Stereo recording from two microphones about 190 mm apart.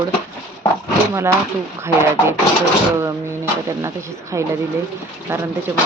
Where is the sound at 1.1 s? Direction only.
15° right (ahead or behind).